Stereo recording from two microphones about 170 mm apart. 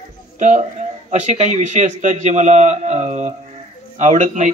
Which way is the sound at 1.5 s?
45° right (ahead or behind).